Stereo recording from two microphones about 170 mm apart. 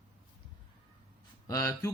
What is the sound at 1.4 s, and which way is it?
Speech, 20° left (ahead or behind).